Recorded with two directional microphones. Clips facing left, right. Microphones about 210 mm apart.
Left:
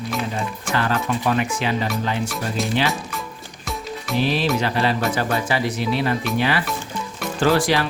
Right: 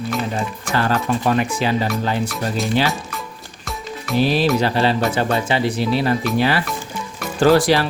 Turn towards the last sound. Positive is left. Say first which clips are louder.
# right 4 dB
turn(degrees=-35)  # may be behind; listen again after turning